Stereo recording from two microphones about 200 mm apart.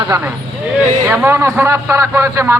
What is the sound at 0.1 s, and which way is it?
A man's voice, 15° right (ahead or behind).